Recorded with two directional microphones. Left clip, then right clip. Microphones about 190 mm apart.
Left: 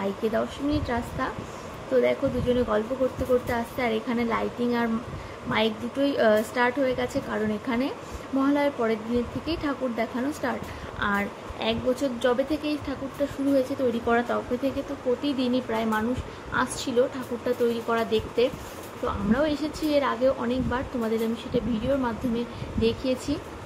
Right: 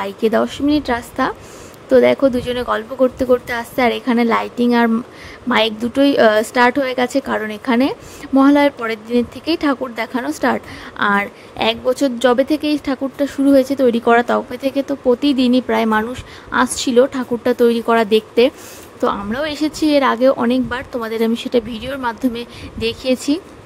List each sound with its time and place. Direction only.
0.0 s speech: 60° right (ahead or behind)